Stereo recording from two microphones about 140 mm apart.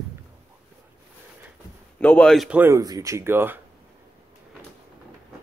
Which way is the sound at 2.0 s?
10° left (ahead or behind).